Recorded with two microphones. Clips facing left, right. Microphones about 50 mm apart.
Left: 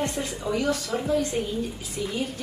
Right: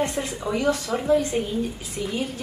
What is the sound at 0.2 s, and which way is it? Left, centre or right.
Speech, right.